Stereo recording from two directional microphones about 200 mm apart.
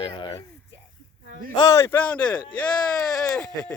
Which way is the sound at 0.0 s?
25° left (ahead or behind).